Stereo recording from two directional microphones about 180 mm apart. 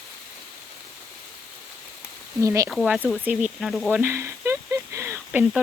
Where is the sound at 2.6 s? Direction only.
5° right (ahead or behind).